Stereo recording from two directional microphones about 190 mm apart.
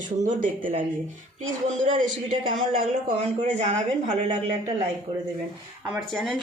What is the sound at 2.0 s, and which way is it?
Speech, 45° right (ahead or behind).